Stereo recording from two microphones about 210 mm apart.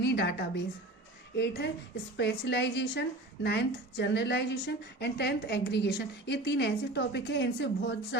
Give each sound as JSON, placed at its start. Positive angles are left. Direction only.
{"t": 0.0, "sound": "a woman's voice", "side_deg": 50}